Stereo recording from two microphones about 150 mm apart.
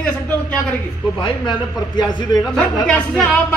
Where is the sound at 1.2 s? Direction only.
30° left (ahead or behind).